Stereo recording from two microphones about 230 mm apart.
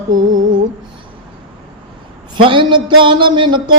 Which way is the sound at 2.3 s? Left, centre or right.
Right.